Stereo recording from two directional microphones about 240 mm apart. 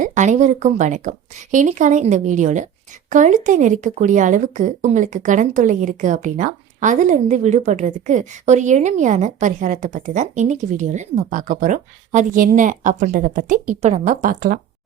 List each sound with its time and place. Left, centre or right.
0.0 s speech: right